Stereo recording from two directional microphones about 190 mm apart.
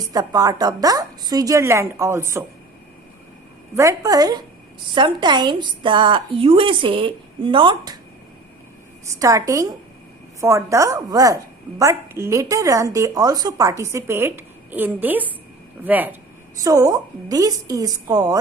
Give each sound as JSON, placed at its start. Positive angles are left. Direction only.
{"t": 0.0, "sound": "a woman's voice", "side_deg": -20}
{"t": 3.8, "sound": "a woman's voice", "side_deg": -15}
{"t": 9.1, "sound": "a woman's voice", "side_deg": -15}